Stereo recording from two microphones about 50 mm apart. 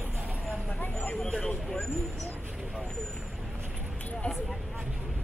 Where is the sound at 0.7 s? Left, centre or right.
Left.